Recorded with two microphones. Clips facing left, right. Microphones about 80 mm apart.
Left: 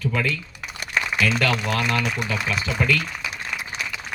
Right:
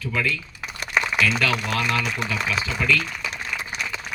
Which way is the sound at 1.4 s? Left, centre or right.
Left.